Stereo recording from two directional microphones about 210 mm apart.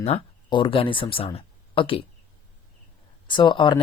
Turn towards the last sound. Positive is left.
turn(degrees=20)  # may be behind; listen again after turning